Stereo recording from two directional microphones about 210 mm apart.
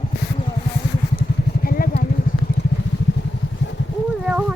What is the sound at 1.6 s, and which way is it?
Vehicle, 45° left (ahead or behind).